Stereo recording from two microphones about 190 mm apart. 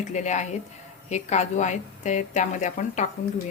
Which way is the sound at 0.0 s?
40° left (ahead or behind).